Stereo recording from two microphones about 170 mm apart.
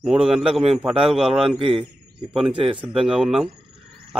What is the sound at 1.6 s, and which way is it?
Speech, 30° right (ahead or behind).